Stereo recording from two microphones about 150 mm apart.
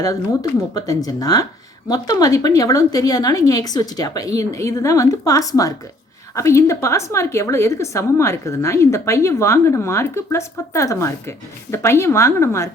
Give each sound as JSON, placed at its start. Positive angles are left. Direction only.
{"t": 0.7, "sound": "a woman's voice", "side_deg": 25}